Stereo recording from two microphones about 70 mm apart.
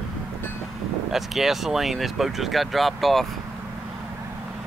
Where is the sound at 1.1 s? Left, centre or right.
Centre.